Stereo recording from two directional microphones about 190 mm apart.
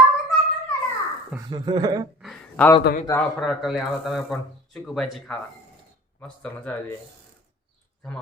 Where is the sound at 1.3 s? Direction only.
20° right (ahead or behind).